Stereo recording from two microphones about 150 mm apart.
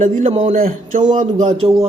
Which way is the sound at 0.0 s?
50° right (ahead or behind).